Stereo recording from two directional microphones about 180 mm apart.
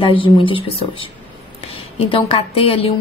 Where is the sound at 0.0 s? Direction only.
30° left (ahead or behind).